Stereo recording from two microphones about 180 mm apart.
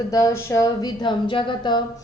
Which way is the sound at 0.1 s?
20° left (ahead or behind).